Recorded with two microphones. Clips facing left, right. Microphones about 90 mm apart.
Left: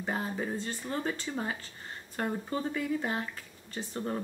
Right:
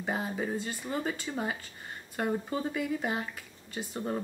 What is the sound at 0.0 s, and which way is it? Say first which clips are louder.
Speech: right 1 dB; 10° right (ahead or behind).